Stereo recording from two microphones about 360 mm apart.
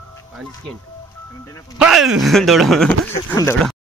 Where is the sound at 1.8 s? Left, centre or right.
Centre.